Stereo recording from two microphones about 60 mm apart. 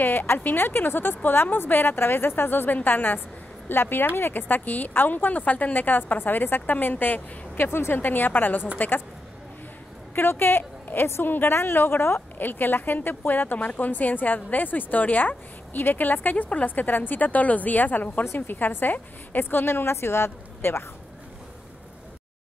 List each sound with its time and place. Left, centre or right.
0.0 s a woman's voice: left
10.1 s a woman's voice: left
18.2 s a woman's voice: left
18.6 s a woman's voice: left